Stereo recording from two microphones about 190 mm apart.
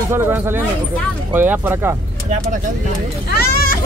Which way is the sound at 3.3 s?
50° left (ahead or behind).